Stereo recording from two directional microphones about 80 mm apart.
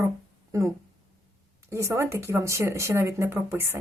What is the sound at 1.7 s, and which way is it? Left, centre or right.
Speech, right.